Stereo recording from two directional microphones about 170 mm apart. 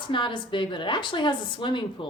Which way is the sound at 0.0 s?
30° left (ahead or behind).